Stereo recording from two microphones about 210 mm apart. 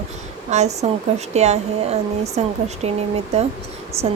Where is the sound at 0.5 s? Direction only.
35° right (ahead or behind).